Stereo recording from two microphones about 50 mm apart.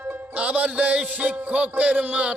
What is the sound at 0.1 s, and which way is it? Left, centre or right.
Music, right.